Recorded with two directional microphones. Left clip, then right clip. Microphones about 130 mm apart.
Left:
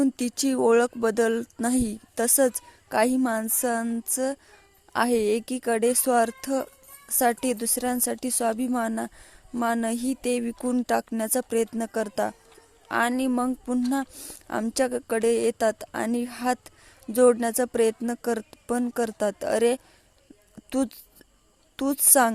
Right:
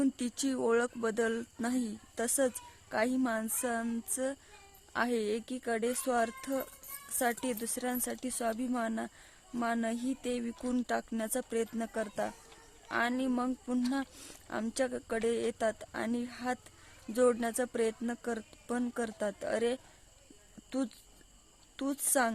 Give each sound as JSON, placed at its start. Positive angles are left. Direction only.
{"t": 0.0, "sound": "speech", "side_deg": 50}
{"t": 10.6, "sound": "speech", "side_deg": 35}
{"t": 11.1, "sound": "a woman's voice", "side_deg": 50}